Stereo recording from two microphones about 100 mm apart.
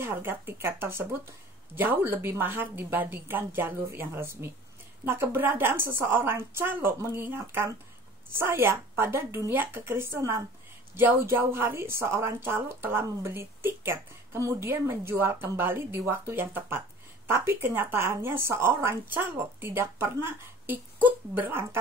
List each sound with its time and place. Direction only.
0.0 s a woman's voice: 25° right (ahead or behind)